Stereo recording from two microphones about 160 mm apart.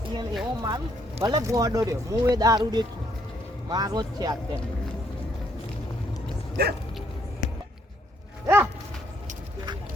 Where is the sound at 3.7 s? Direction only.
25° right (ahead or behind).